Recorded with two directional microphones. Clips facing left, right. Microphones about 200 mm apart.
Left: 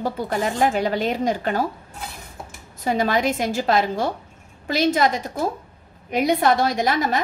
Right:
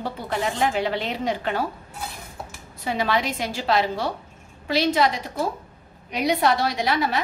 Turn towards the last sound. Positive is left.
turn(degrees=45)  # may be behind; listen again after turning